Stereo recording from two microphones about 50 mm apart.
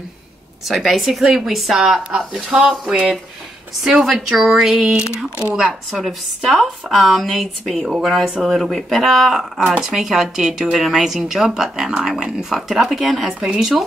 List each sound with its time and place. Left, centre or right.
0.7 s a woman's voice: centre
4.0 s speech: centre
5.0 s speech: left
5.6 s a woman's voice: centre
13.3 s speech: centre
13.6 s a woman's voice: centre